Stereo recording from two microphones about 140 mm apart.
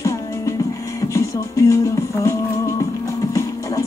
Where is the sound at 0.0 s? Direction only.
20° left (ahead or behind).